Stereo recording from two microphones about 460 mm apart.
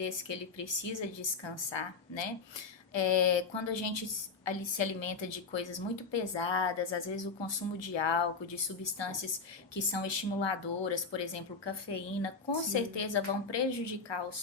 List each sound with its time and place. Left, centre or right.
0.0 s a woman's voice: left
12.7 s speech: left